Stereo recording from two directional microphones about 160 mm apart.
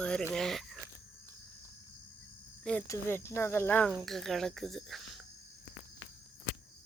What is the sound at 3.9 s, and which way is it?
Speech, centre (ahead or behind).